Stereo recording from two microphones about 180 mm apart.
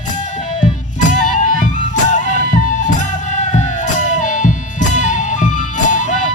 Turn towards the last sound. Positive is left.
turn(degrees=45)  # may be behind; listen again after turning